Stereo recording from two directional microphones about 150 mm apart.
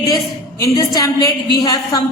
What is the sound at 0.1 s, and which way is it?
A woman's voice, 25° left (ahead or behind).